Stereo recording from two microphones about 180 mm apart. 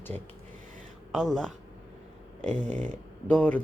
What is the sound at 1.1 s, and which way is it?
Speech, centre (ahead or behind).